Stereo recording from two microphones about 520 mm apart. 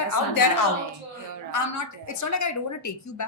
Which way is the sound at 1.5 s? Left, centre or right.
Left.